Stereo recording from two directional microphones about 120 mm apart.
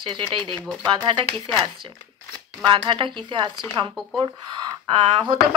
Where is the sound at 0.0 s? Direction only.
40° right (ahead or behind).